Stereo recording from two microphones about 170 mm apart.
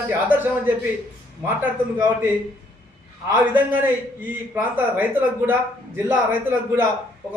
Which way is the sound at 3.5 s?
10° right (ahead or behind).